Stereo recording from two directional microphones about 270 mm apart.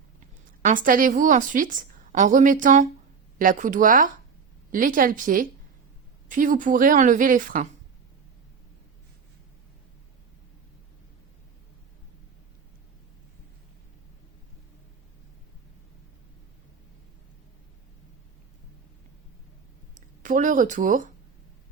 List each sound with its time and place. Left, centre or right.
0.6 s a woman's voice: right
20.2 s a woman's voice: right